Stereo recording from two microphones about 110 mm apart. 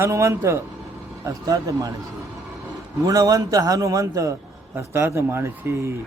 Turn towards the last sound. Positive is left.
turn(degrees=-25)  # may be behind; listen again after turning